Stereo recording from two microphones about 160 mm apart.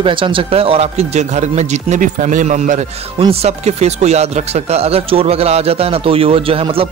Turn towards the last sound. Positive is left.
turn(degrees=-35)  # may be behind; listen again after turning